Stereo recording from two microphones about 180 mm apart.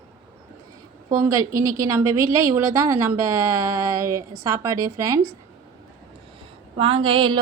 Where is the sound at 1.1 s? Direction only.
15° right (ahead or behind).